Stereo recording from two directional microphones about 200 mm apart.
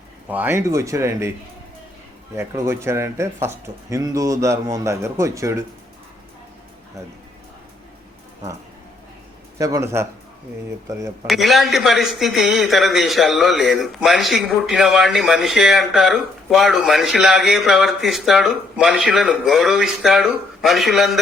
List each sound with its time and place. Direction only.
0.3 s speech: 10° right (ahead or behind)
2.3 s speech: 15° right (ahead or behind)
9.6 s speech: 15° right (ahead or behind)
11.3 s a man's voice: centre (ahead or behind)